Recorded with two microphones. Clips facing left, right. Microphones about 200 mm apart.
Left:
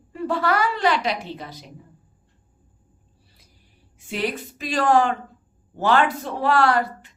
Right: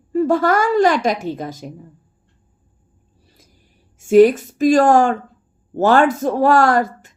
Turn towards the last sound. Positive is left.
turn(degrees=-45)  # may be behind; listen again after turning